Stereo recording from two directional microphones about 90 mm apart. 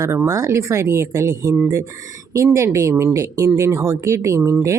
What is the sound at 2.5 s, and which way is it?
Speech, 35° right (ahead or behind).